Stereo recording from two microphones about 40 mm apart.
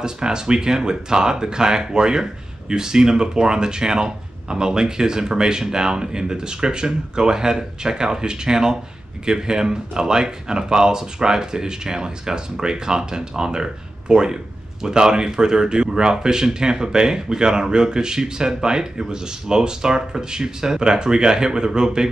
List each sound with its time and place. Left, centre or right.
0.0 s speech: centre